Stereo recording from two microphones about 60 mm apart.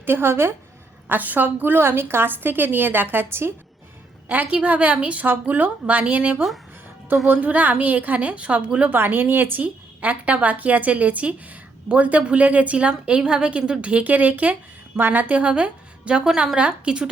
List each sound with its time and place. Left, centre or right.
0.0 s a woman's voice: right
1.0 s a woman's voice: right
4.3 s a woman's voice: right
9.6 s a woman's voice: right